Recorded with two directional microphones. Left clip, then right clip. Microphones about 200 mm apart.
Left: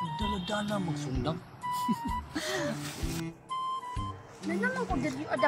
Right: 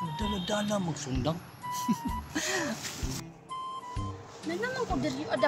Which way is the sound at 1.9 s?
20° right (ahead or behind).